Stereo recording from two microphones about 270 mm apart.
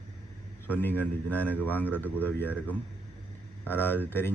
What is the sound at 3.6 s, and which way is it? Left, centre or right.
Speech, centre.